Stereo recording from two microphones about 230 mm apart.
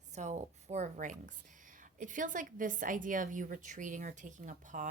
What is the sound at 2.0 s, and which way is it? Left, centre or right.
A woman's voice, right.